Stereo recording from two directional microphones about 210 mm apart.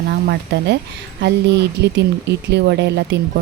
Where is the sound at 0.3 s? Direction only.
55° right (ahead or behind).